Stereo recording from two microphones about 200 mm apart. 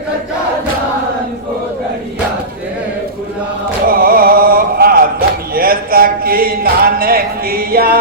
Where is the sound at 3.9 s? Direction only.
50° right (ahead or behind).